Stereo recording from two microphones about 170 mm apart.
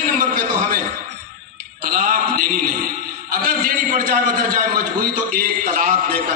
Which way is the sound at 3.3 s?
55° right (ahead or behind).